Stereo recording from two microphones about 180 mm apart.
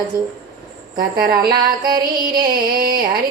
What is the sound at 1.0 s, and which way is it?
Music, 55° right (ahead or behind).